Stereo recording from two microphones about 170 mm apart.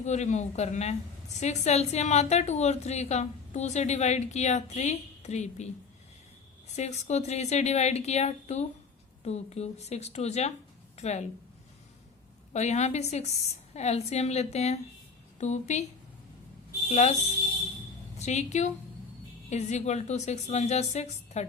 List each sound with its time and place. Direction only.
0.0 s a woman's voice: 40° left (ahead or behind)
6.7 s a woman's voice: 40° left (ahead or behind)
12.5 s a woman's voice: 40° left (ahead or behind)
16.9 s a woman's voice: 40° left (ahead or behind)
18.2 s a woman's voice: 40° left (ahead or behind)